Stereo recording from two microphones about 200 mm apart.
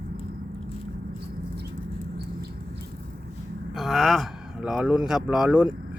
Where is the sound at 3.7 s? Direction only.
Centre (ahead or behind).